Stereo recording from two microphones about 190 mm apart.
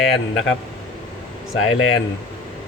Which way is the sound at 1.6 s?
90° left.